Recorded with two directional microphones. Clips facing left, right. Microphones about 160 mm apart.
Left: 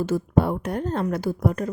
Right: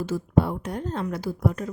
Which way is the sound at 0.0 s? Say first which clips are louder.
Left 2 dB; 55° left (ahead or behind).